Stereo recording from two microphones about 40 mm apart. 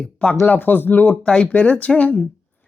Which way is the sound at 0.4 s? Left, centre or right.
Left.